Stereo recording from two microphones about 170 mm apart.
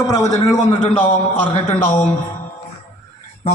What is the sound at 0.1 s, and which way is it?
A man's voice, 20° left (ahead or behind).